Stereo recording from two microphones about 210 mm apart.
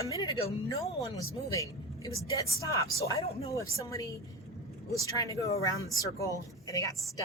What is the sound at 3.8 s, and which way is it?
Speech, 15° left (ahead or behind).